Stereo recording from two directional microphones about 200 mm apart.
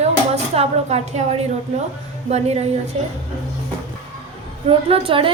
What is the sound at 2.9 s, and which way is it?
Speech, 30° right (ahead or behind).